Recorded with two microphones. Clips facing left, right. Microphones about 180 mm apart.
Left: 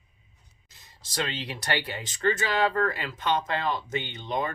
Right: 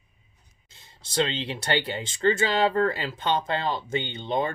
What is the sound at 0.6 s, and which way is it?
Speech, 25° right (ahead or behind).